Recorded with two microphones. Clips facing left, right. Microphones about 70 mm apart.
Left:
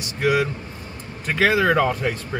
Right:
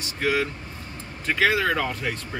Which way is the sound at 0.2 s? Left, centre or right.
Centre.